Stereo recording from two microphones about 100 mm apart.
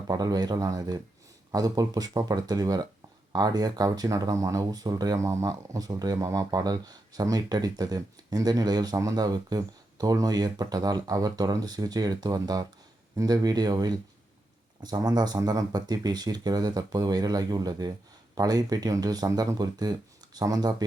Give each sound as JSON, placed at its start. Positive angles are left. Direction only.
{"t": 0.1, "sound": "speech", "side_deg": -40}